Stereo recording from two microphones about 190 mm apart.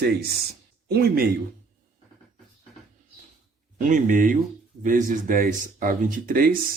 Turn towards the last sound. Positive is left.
turn(degrees=-50)  # may be behind; listen again after turning